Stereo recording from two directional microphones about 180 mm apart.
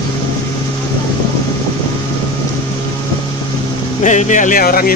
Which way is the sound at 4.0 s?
40° left (ahead or behind).